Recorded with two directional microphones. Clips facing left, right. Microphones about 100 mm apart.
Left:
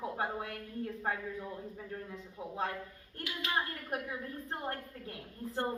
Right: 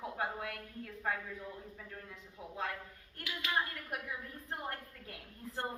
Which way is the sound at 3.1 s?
30° left (ahead or behind).